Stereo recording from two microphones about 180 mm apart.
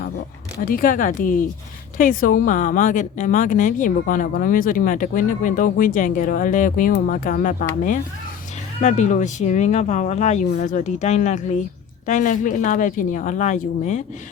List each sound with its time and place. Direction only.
0.6 s a woman's voice: 55° left (ahead or behind)